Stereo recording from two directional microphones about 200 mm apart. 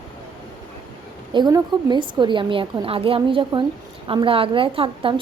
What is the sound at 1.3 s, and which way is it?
A woman's voice, 20° right (ahead or behind).